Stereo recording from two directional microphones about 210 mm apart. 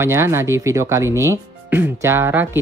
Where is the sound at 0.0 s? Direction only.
10° right (ahead or behind).